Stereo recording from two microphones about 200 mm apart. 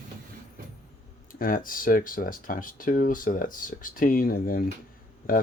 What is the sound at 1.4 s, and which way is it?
Speech, 45° left (ahead or behind).